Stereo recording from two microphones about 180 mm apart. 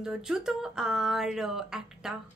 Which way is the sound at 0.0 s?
5° right (ahead or behind).